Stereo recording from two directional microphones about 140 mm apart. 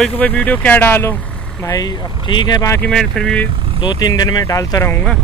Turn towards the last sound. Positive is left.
turn(degrees=25)  # may be behind; listen again after turning